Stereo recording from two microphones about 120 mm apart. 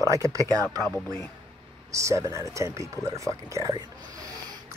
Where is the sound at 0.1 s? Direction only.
25° right (ahead or behind).